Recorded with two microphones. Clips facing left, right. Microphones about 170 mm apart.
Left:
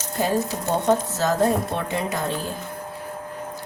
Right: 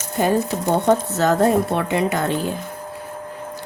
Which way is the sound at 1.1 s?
60° right (ahead or behind).